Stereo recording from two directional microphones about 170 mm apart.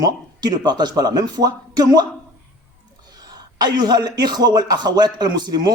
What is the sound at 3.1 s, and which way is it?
Speech, 25° right (ahead or behind).